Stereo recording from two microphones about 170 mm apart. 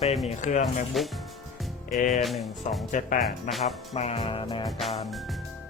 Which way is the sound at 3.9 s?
40° left (ahead or behind).